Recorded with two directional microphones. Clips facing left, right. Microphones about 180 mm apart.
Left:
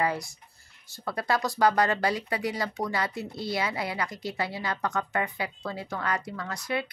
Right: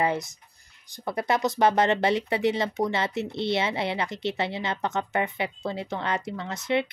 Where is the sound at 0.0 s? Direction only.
20° right (ahead or behind).